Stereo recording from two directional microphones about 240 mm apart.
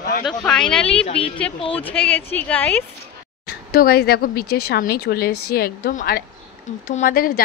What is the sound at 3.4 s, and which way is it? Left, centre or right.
Speech, left.